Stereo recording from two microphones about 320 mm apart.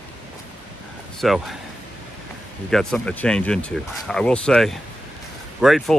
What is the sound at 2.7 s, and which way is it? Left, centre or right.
Speech, centre.